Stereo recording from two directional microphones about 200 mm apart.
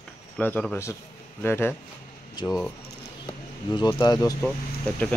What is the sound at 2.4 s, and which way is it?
Speech, 20° left (ahead or behind).